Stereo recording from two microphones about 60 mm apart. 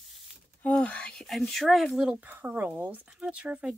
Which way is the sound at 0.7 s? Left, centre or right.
Centre.